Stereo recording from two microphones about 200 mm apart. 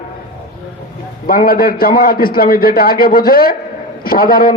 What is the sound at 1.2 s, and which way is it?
A man's voice, 45° left (ahead or behind).